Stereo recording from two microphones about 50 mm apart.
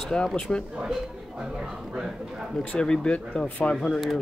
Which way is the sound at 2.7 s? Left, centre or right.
Centre.